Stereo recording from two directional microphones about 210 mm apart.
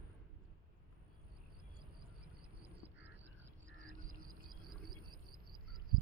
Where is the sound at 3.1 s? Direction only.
60° right (ahead or behind).